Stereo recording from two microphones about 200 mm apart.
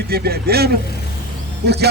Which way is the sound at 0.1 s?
50° right (ahead or behind).